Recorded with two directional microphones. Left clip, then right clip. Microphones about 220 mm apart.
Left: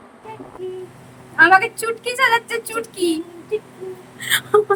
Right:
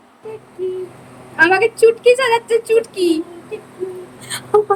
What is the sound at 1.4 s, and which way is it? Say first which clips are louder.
Speech: right 1 dB; 40° left (ahead or behind).